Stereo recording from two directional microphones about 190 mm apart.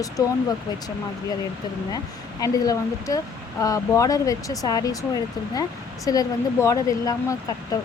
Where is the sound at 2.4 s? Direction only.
20° left (ahead or behind).